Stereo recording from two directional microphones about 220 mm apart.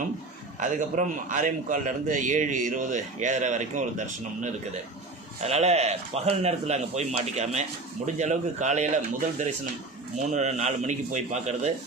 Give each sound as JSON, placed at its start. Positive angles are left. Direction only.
{"t": 0.6, "sound": "a man's voice", "side_deg": -35}
{"t": 10.2, "sound": "a man's voice", "side_deg": -30}